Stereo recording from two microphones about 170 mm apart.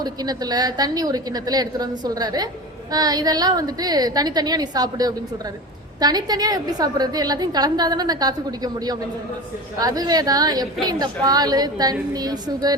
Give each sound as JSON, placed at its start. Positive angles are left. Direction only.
{"t": 0.0, "sound": "a woman's voice", "side_deg": -25}